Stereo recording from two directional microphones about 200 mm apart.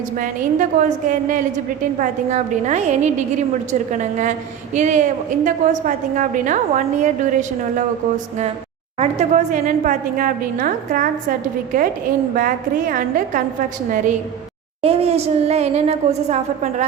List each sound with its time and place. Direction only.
0.2 s a woman's voice: 40° right (ahead or behind)
9.0 s a woman's voice: 35° right (ahead or behind)
14.8 s a woman's voice: 30° right (ahead or behind)